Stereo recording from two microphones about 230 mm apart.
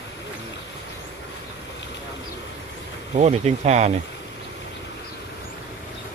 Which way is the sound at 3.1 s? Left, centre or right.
Right.